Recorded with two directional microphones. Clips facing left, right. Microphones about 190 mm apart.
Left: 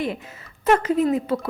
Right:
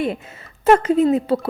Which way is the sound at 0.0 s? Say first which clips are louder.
Right 4 dB; 25° right (ahead or behind).